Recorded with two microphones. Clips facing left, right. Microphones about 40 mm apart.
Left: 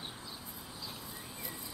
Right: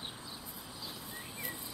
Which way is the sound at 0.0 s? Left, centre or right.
Centre.